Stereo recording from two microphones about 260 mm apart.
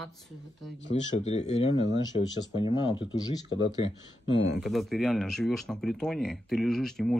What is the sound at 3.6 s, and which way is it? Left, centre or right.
Speech, centre.